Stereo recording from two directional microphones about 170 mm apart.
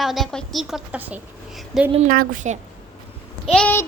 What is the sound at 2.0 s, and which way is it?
Speech, 55° right (ahead or behind).